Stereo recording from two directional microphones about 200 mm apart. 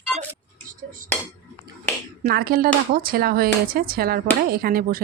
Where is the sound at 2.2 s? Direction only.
50° right (ahead or behind).